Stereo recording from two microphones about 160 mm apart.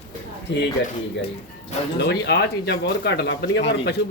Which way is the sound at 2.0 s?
90° left.